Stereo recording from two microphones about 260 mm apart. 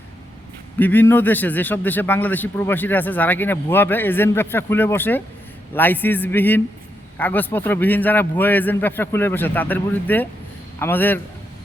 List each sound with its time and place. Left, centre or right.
0.8 s a man's voice: centre